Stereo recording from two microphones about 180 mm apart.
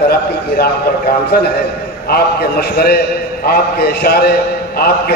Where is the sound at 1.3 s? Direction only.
60° left (ahead or behind).